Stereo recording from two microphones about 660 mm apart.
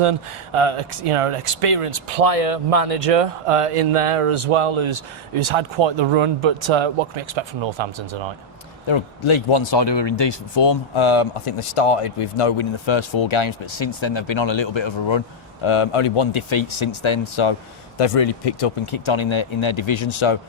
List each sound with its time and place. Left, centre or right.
0.0 s speech: right
8.9 s speech: left